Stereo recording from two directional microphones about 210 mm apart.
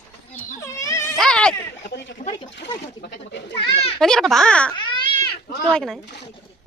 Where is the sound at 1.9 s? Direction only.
55° left (ahead or behind).